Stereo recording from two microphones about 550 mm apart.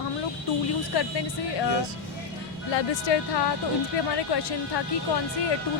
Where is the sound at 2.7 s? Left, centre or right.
Left.